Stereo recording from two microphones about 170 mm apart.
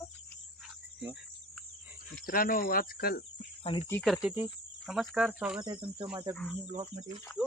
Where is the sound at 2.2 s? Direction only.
55° left (ahead or behind).